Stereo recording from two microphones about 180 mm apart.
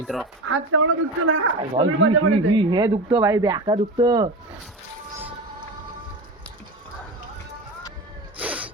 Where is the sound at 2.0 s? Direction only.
90° right.